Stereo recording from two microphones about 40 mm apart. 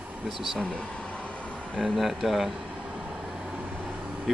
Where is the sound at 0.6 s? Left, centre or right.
Left.